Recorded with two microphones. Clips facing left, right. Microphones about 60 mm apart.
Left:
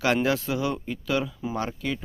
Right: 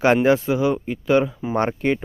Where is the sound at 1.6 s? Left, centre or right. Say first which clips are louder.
Right 10 dB; right.